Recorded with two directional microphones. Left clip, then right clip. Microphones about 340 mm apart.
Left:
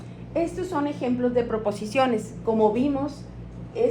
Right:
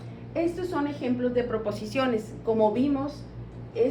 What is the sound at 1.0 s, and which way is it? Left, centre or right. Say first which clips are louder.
A woman's voice: left 3 dB; centre.